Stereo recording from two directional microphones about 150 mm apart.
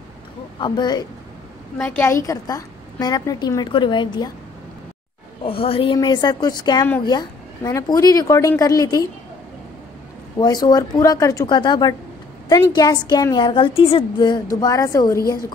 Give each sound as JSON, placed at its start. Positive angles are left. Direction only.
{"t": 0.6, "sound": "a woman's voice", "side_deg": 30}
{"t": 1.8, "sound": "a woman's voice", "side_deg": 10}
{"t": 5.4, "sound": "a woman's voice", "side_deg": 35}
{"t": 10.4, "sound": "a woman's voice", "side_deg": 25}